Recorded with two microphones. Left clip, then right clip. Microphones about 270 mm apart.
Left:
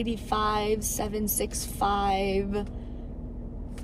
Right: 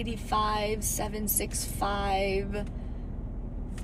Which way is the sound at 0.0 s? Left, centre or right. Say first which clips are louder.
Left 1 dB; centre.